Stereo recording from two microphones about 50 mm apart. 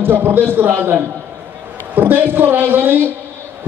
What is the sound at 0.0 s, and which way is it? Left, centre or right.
A man's voice, right.